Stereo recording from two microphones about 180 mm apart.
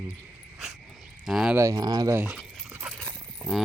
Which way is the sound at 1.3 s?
Centre (ahead or behind).